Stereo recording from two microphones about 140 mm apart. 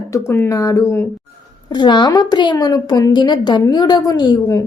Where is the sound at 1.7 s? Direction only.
35° left (ahead or behind).